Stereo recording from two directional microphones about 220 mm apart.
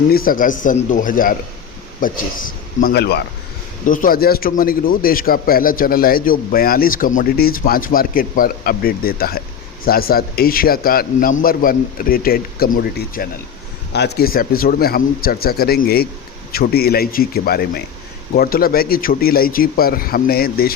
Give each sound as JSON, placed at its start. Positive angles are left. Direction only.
{"t": 0.1, "sound": "speech", "side_deg": 40}
{"t": 3.8, "sound": "speech", "side_deg": 40}